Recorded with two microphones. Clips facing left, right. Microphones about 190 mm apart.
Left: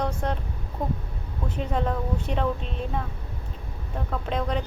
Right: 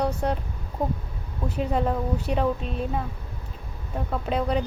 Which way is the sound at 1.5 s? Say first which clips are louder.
Right 3 dB; 5° right (ahead or behind).